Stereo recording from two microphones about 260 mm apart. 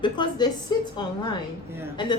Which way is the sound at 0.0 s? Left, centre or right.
Centre.